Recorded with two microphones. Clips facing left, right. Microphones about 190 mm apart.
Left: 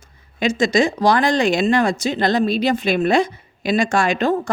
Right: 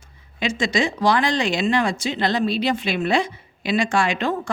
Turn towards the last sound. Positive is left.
turn(degrees=40)  # may be behind; listen again after turning